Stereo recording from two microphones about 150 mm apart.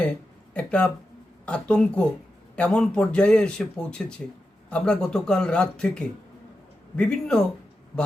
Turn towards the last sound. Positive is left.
turn(degrees=5)  # may be behind; listen again after turning